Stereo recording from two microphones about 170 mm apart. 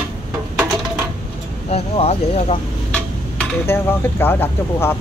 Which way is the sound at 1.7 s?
35° left (ahead or behind).